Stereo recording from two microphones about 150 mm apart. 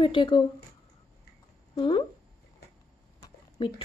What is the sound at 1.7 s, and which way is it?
Speech, 35° left (ahead or behind).